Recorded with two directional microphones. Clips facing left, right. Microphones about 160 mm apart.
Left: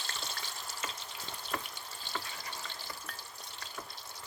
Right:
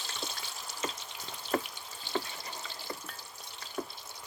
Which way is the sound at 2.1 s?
30° right (ahead or behind).